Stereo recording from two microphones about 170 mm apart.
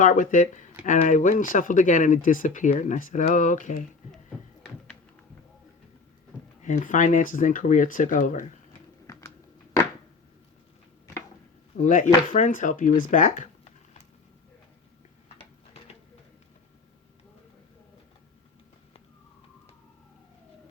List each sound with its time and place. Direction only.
0.0 s speech: 50° left (ahead or behind)
6.6 s speech: 45° left (ahead or behind)
11.8 s speech: 50° left (ahead or behind)